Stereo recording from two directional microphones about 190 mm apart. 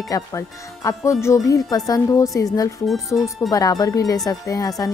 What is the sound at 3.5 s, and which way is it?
Speech, 20° left (ahead or behind).